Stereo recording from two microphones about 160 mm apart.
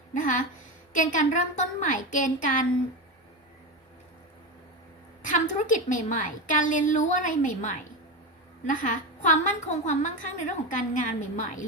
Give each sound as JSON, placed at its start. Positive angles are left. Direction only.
{"t": 0.1, "sound": "a woman's voice", "side_deg": 55}
{"t": 5.2, "sound": "a woman's voice", "side_deg": 55}